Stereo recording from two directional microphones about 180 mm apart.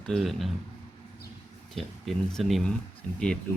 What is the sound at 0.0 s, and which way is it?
Speech, centre (ahead or behind).